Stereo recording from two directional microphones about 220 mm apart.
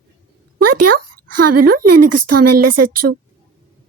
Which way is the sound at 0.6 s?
90° right.